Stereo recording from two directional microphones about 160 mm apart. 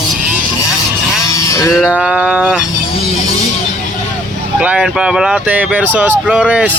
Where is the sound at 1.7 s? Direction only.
5° right (ahead or behind).